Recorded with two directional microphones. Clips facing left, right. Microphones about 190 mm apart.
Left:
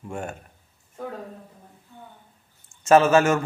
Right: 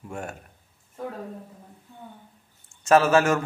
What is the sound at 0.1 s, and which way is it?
Speech, centre (ahead or behind).